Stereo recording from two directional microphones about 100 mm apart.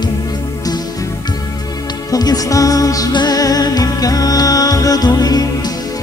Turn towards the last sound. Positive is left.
turn(degrees=40)  # may be behind; listen again after turning